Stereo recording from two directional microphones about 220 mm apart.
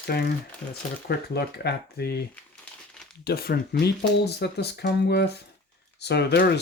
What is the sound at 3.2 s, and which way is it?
Speech, 45° left (ahead or behind).